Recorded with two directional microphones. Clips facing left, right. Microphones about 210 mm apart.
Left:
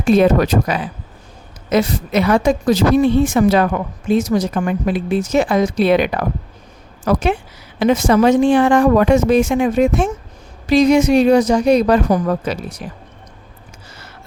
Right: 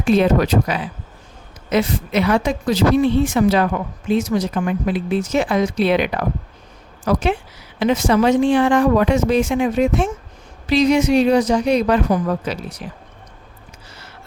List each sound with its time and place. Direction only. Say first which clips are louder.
0.1 s a woman's voice: left 3 dB; 45° left (ahead or behind)